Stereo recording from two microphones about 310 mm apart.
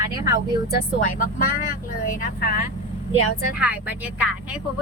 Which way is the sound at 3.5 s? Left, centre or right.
Centre.